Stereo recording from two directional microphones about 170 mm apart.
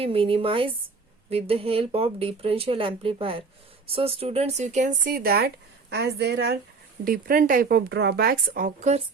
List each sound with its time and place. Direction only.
0.0 s speech: 30° right (ahead or behind); by 5.5 s 60° right (ahead or behind)
5.9 s a woman's voice: 80° right
7.0 s speech: 60° right (ahead or behind)